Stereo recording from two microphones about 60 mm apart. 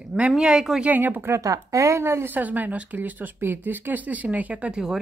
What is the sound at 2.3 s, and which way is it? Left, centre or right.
Speech, right.